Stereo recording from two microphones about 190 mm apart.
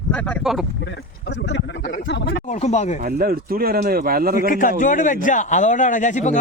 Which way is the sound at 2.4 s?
35° left (ahead or behind).